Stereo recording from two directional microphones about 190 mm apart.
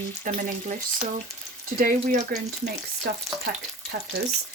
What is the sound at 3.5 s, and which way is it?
Frying, 55° right (ahead or behind).